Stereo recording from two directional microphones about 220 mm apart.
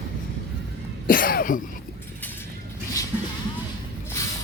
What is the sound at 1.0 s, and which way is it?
Cough, 40° left (ahead or behind).